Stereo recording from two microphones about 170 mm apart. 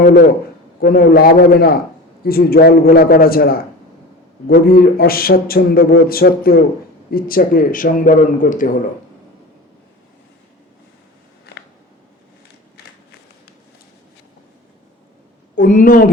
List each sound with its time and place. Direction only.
0.0 s a man's voice: 55° left (ahead or behind)
15.5 s speech: 55° left (ahead or behind)